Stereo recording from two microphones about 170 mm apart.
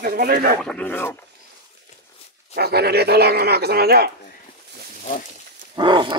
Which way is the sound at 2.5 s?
70° right (ahead or behind).